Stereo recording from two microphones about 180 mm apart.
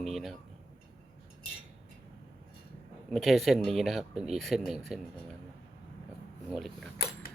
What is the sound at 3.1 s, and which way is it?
Speech, centre (ahead or behind).